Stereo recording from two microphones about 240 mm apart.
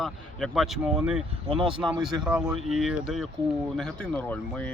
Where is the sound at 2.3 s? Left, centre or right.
Centre.